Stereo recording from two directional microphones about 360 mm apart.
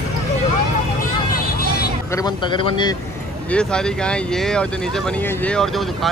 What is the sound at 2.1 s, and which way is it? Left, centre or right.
Speech, centre.